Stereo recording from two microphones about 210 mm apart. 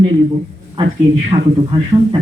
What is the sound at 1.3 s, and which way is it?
Speech, 30° right (ahead or behind).